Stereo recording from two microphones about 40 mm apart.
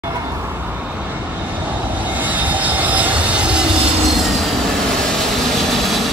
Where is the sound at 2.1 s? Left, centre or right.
Right.